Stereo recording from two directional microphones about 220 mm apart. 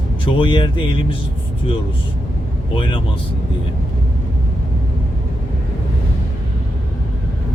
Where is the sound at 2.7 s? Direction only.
20° left (ahead or behind).